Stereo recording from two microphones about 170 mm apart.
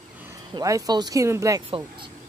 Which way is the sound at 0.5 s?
20° right (ahead or behind).